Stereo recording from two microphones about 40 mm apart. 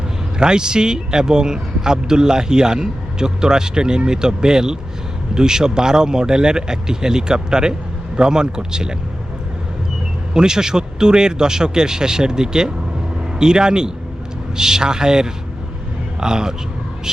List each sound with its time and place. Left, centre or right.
0.3 s speech: centre
10.3 s speech: centre